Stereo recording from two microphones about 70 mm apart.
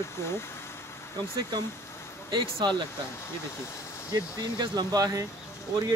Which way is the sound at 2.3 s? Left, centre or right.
Right.